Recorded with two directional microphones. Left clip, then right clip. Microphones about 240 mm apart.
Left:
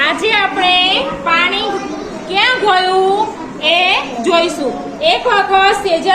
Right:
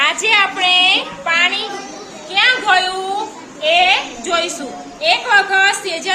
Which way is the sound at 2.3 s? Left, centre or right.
Right.